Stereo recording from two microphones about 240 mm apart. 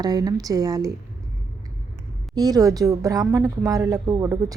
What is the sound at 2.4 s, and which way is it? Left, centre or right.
A woman's voice, centre.